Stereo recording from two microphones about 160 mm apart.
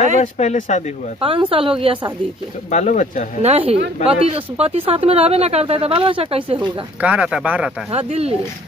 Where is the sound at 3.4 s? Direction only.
40° right (ahead or behind).